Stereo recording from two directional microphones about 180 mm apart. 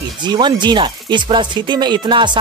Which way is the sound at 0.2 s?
25° right (ahead or behind).